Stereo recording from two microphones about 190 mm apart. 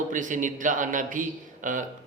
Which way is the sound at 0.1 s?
40° right (ahead or behind).